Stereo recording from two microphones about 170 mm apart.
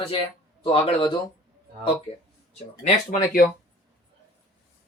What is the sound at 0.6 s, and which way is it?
Speech, 30° left (ahead or behind).